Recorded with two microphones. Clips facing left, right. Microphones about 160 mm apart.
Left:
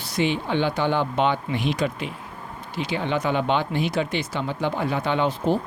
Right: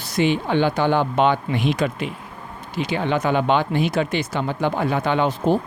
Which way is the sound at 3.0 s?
50° right (ahead or behind).